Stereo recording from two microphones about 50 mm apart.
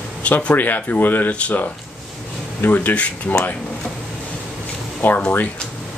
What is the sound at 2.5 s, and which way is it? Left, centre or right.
Speech, left.